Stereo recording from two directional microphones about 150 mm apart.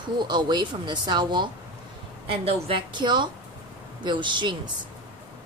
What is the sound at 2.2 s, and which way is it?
Speech, 40° right (ahead or behind).